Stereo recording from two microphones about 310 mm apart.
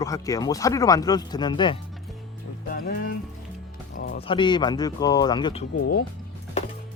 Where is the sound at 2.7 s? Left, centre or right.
Left.